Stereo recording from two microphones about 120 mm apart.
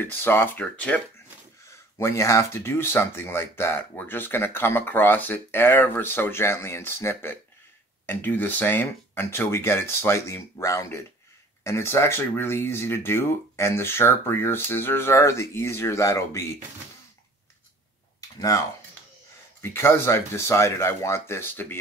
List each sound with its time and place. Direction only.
0.0 s speech: 20° left (ahead or behind)
1.7 s speech: 25° left (ahead or behind)
19.6 s speech: 20° left (ahead or behind)